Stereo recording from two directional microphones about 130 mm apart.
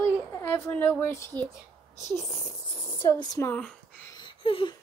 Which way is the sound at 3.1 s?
20° left (ahead or behind).